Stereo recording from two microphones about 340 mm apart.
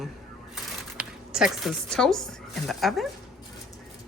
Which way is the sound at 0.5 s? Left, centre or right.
Centre.